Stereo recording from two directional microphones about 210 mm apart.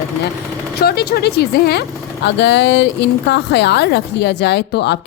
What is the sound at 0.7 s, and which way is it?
Speech, 50° left (ahead or behind).